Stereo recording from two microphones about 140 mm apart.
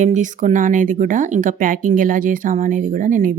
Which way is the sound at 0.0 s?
60° right (ahead or behind).